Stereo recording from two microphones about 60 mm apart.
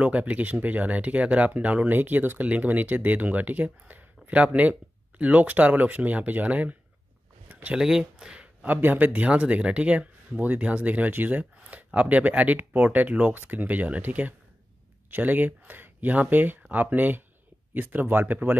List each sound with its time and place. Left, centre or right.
0.0 s speech: right
7.7 s speech: centre
8.2 s a sound: centre
8.6 s speech: right